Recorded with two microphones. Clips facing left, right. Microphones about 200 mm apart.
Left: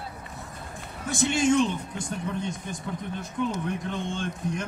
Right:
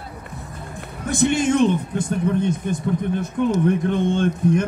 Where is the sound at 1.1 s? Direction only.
60° right (ahead or behind).